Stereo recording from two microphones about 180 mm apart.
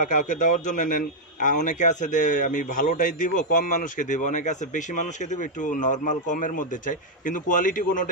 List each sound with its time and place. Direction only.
0.0 s a man's voice: 45° left (ahead or behind)